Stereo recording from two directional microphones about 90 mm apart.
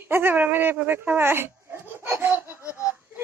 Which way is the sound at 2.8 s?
20° right (ahead or behind).